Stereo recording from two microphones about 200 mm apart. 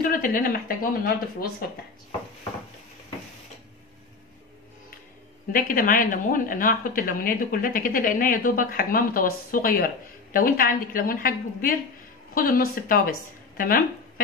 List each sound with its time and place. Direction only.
0.0 s speech: 45° left (ahead or behind)
5.5 s speech: 45° left (ahead or behind)